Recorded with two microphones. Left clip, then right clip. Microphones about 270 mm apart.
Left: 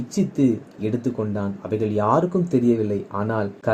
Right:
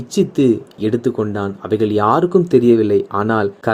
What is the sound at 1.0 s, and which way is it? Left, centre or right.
Speech, right.